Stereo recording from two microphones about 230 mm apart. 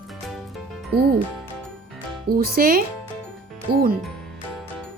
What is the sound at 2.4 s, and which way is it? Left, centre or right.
Speech, right.